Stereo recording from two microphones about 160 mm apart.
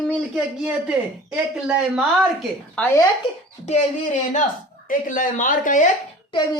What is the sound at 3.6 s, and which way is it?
Speech, 45° left (ahead or behind).